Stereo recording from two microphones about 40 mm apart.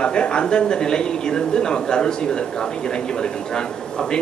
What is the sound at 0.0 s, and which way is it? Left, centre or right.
Speech, left.